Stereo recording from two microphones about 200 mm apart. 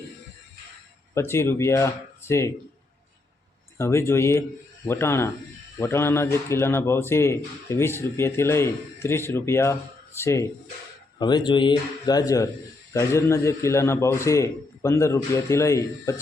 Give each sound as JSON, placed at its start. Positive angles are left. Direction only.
{"t": 1.1, "sound": "a man's voice", "side_deg": 15}
{"t": 3.8, "sound": "a man's voice", "side_deg": 15}